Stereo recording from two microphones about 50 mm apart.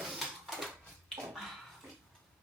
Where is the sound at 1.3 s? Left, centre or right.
Centre.